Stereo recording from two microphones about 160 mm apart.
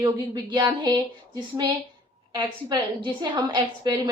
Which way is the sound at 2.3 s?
25° right (ahead or behind).